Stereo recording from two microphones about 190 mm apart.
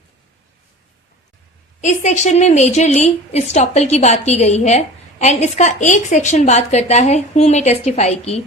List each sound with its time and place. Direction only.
1.8 s a woman's voice: 40° left (ahead or behind)